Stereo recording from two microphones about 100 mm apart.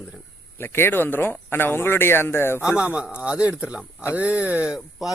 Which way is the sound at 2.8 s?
10° right (ahead or behind).